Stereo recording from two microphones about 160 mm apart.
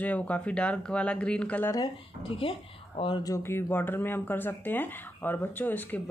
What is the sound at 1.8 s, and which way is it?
Speech, 35° left (ahead or behind).